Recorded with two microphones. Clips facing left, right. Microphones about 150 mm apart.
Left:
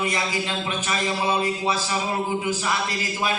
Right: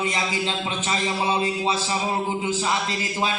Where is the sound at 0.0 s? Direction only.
20° right (ahead or behind).